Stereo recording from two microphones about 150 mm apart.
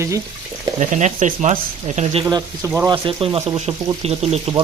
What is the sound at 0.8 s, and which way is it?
Speech, 55° right (ahead or behind).